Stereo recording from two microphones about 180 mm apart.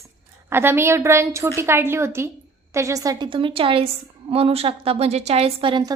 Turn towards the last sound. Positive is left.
turn(degrees=-25)  # may be behind; listen again after turning